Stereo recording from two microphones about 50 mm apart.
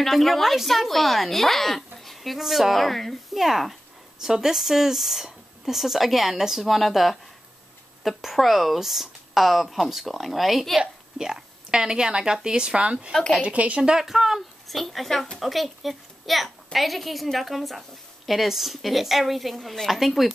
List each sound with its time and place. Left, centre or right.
0.0 s a woman's voice: centre
10.8 s a woman's voice: centre
13.9 s a woman's voice: centre